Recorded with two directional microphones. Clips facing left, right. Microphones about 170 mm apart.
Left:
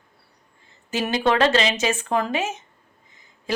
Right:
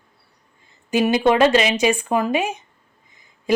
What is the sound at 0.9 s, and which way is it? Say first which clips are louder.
Speech: right 5 dB; 15° right (ahead or behind).